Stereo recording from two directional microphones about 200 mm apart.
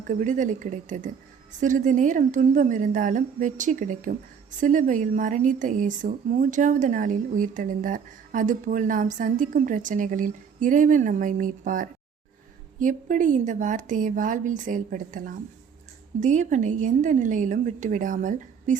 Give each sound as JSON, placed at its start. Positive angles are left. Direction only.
{"t": 0.1, "sound": "speech", "side_deg": -40}